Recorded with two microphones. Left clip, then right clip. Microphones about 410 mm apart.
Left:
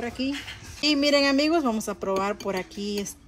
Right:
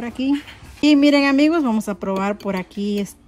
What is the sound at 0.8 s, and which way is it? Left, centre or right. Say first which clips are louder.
Speech: right 6 dB; centre.